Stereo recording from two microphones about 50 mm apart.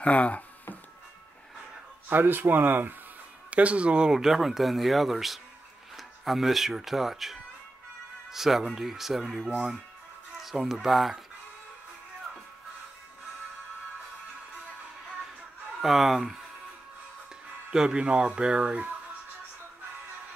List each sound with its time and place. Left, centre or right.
0.0 s a sound: left
2.0 s speech: right
3.4 s speech: right
4.1 s speech: centre
15.8 s speech: centre
17.7 s speech: centre